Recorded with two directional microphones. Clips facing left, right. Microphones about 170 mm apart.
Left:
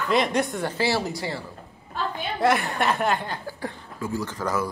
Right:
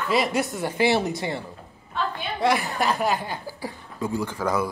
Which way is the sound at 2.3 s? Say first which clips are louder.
Left 1 dB; centre (ahead or behind).